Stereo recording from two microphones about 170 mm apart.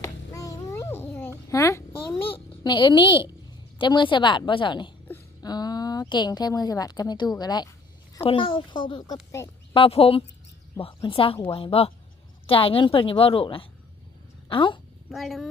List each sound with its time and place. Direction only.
0.0 s a sound: 20° left (ahead or behind)
2.2 s a child's voice: 30° left (ahead or behind)
9.7 s a woman's voice: 35° left (ahead or behind)
15.1 s speech: centre (ahead or behind)